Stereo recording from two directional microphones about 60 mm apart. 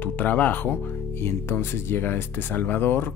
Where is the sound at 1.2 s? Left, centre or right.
Left.